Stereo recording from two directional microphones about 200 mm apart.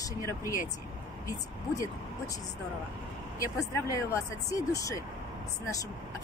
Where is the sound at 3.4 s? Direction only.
15° left (ahead or behind).